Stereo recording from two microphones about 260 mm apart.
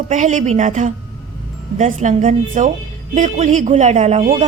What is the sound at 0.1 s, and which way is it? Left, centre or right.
A woman's voice, right.